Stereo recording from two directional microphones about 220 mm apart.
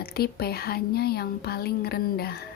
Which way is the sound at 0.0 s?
45° left (ahead or behind).